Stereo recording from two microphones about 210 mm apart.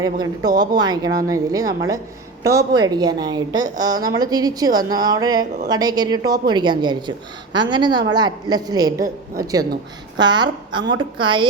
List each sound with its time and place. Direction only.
0.0 s a woman's voice: 20° right (ahead or behind)